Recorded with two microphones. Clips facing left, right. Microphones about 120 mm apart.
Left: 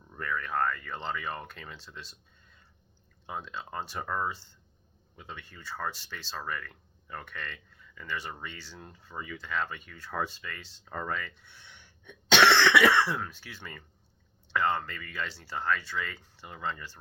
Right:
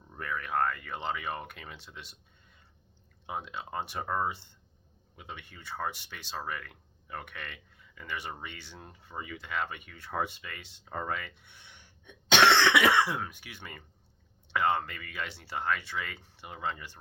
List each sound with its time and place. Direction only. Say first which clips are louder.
0.1 s speech: even; 20° right (ahead or behind)
3.5 s speech: right 1 dB; 20° right (ahead or behind)
11.5 s gasp: left 1 dB; 55° right (ahead or behind)
12.0 s speech: left 1 dB; 20° right (ahead or behind)